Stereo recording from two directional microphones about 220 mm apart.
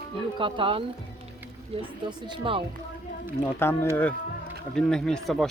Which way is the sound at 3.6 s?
10° left (ahead or behind).